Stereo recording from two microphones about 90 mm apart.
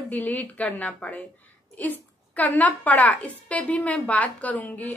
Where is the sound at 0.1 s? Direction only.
15° left (ahead or behind).